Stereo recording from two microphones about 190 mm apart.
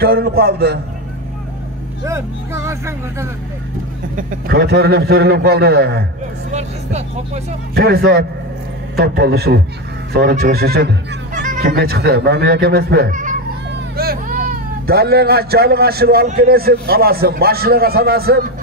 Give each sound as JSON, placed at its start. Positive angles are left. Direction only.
{"t": 0.0, "sound": "a man's voice", "side_deg": -55}
{"t": 2.0, "sound": "speech", "side_deg": -15}
{"t": 4.2, "sound": "a man's voice", "side_deg": -50}
{"t": 6.5, "sound": "speech", "side_deg": -35}
{"t": 7.7, "sound": "a man's voice", "side_deg": -55}
{"t": 11.3, "sound": "a man's voice", "side_deg": -45}